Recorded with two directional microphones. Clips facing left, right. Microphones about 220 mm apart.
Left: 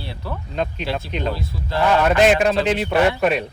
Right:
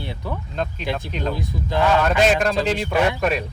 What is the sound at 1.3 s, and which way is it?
Speech, 15° right (ahead or behind).